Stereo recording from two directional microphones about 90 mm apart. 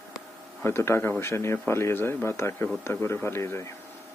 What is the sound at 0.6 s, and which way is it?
A man's voice, 30° left (ahead or behind).